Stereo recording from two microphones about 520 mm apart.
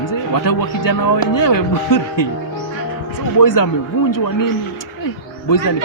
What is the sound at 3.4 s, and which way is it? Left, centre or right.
Speech, left.